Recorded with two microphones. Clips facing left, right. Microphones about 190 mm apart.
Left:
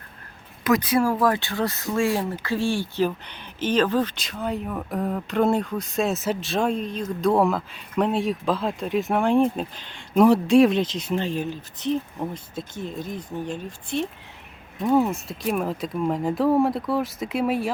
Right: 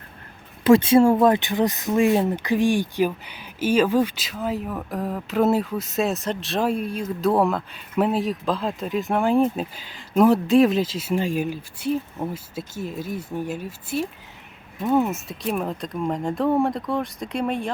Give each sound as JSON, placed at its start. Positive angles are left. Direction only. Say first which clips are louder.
{"t": 0.6, "sound": "speech", "louder": "right 6 dB", "side_deg": -25}